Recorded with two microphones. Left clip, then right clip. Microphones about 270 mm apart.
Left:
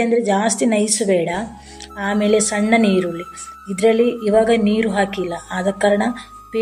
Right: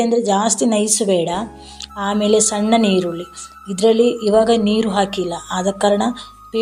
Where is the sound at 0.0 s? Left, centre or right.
Centre.